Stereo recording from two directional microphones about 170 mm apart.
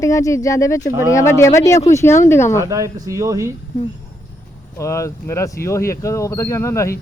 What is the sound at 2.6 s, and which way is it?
Speech, 20° right (ahead or behind).